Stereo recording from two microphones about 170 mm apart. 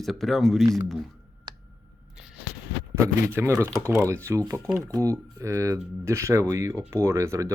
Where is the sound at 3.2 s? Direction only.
15° right (ahead or behind).